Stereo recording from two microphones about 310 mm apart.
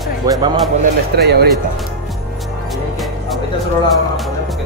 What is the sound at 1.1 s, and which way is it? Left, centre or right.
Speech, right.